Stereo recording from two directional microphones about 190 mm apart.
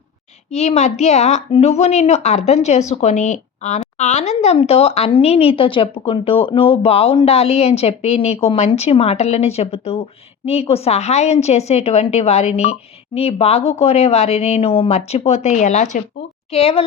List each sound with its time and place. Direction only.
0.5 s a woman's voice: 35° left (ahead or behind)